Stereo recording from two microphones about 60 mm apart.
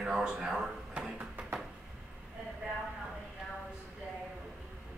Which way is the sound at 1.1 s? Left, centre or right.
Right.